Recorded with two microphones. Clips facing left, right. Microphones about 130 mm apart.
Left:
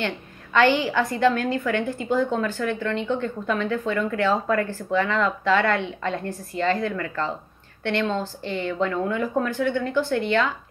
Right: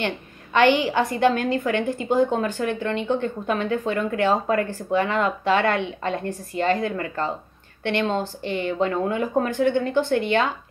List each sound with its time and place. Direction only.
0.0 s a woman's voice: 20° right (ahead or behind)